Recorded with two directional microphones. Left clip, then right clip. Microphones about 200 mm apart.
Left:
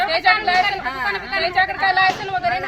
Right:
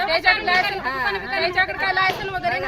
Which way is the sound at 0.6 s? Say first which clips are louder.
Left 2 dB; 45° right (ahead or behind).